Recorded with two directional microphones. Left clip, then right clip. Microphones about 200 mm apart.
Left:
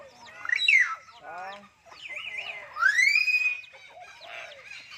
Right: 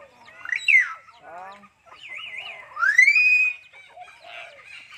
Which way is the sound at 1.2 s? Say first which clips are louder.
Even; 50° right (ahead or behind).